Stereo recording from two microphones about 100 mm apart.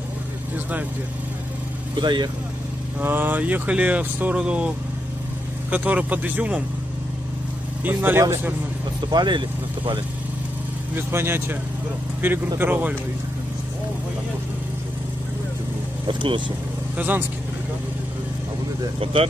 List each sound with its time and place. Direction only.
2.0 s speech: 50° right (ahead or behind)
3.0 s speech: 20° right (ahead or behind)
7.8 s speech: 20° right (ahead or behind)
9.1 s speech: 50° right (ahead or behind)
11.0 s speech: 25° right (ahead or behind)
16.1 s speech: 55° right (ahead or behind)
16.9 s speech: 20° right (ahead or behind)